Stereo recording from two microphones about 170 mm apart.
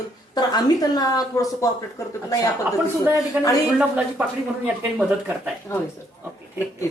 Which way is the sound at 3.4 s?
10° right (ahead or behind).